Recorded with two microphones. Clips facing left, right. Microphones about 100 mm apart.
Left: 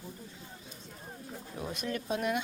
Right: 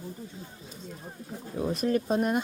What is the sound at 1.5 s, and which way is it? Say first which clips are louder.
Speech: right 10 dB; 35° right (ahead or behind).